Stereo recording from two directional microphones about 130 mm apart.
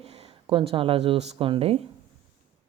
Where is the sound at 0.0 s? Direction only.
50° right (ahead or behind).